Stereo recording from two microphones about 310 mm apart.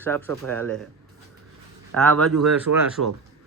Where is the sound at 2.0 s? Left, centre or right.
Centre.